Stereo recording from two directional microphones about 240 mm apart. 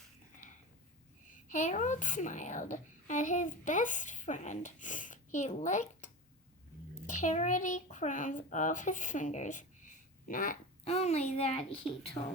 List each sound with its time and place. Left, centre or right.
1.5 s a child's voice: left
7.1 s a child's voice: left